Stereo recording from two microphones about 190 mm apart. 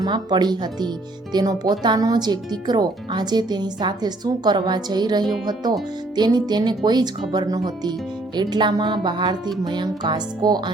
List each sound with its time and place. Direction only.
0.0 s speech: 20° right (ahead or behind)